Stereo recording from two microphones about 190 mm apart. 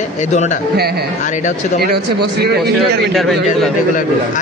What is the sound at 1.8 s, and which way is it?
Speech, 55° right (ahead or behind).